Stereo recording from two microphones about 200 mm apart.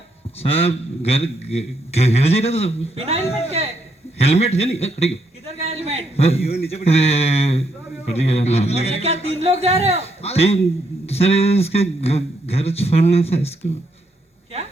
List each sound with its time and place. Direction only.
0.4 s a man's voice: 30° left (ahead or behind)
2.9 s speech: 30° right (ahead or behind)
3.2 s a man's voice: 30° left (ahead or behind)
5.5 s a sound: 30° right (ahead or behind)
6.1 s a man's voice: 30° left (ahead or behind)
9.4 s speech: 30° right (ahead or behind)
10.0 s a man's voice: 30° left (ahead or behind)